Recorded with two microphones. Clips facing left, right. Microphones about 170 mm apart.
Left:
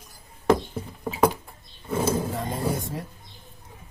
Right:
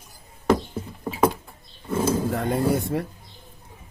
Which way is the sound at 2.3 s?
65° right (ahead or behind).